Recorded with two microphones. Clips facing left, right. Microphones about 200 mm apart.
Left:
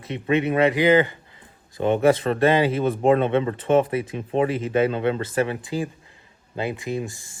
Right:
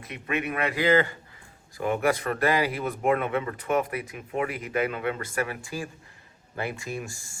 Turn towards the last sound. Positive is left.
turn(degrees=20)  # may be behind; listen again after turning